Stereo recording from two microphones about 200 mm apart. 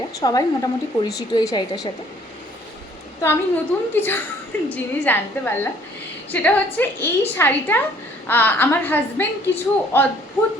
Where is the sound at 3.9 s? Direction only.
10° left (ahead or behind).